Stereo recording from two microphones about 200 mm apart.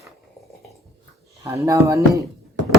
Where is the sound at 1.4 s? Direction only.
15° right (ahead or behind).